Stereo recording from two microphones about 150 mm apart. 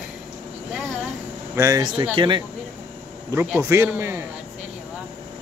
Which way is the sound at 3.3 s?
15° right (ahead or behind).